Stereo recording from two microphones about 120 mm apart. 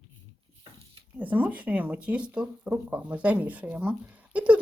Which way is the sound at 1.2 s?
15° right (ahead or behind).